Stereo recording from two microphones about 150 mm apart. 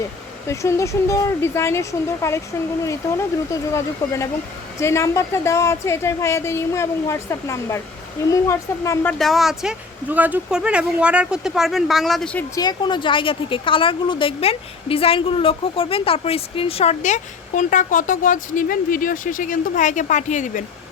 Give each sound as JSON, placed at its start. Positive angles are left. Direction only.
{"t": 0.4, "sound": "a woman's voice", "side_deg": 20}
{"t": 9.1, "sound": "speech", "side_deg": 0}
{"t": 12.5, "sound": "a woman's voice", "side_deg": 30}